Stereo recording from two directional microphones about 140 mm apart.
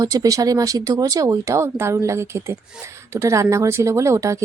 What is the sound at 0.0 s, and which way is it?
Speech, 25° right (ahead or behind).